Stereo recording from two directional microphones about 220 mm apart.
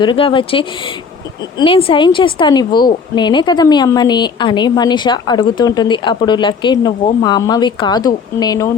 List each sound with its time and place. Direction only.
0.0 s speech: 20° left (ahead or behind)